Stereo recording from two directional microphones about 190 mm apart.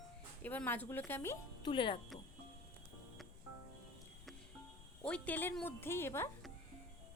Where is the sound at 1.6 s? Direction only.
25° left (ahead or behind).